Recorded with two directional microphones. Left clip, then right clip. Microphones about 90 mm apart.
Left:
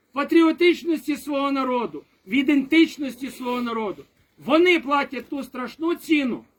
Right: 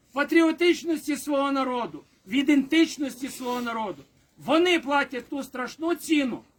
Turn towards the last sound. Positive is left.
turn(degrees=-30)  # may be behind; listen again after turning